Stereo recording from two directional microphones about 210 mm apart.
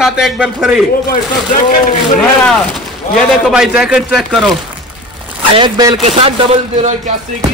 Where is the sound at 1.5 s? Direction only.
40° left (ahead or behind).